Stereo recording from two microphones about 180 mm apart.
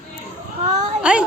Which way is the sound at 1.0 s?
5° right (ahead or behind).